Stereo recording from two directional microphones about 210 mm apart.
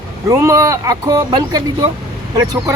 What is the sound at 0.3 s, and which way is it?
Speech, 15° right (ahead or behind).